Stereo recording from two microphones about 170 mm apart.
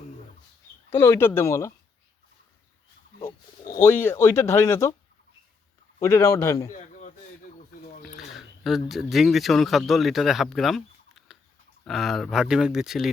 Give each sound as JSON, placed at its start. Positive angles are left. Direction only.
{"t": 0.9, "sound": "speech", "side_deg": 15}
{"t": 3.8, "sound": "speech", "side_deg": 15}
{"t": 6.0, "sound": "speech", "side_deg": 15}
{"t": 8.2, "sound": "speech", "side_deg": 0}